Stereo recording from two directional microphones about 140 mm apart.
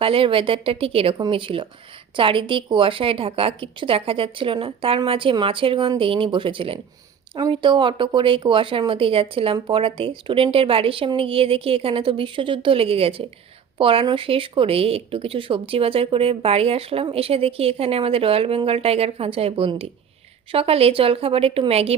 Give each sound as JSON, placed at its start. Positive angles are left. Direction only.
{"t": 0.0, "sound": "a woman's voice", "side_deg": -40}